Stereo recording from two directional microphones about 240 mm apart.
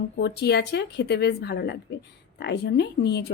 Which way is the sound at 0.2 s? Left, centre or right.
Left.